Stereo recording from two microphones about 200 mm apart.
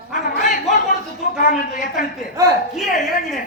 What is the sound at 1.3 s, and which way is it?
Speech, 40° left (ahead or behind).